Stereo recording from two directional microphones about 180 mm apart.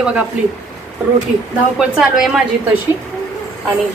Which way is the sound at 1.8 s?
5° right (ahead or behind).